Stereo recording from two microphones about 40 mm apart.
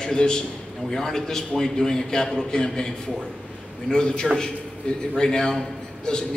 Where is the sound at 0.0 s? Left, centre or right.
Centre.